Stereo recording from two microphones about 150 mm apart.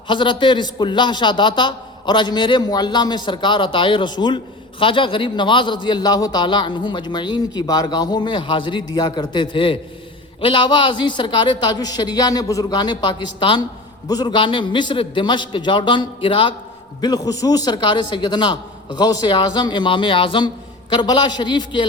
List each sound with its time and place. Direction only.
0.1 s a man's voice: 35° left (ahead or behind)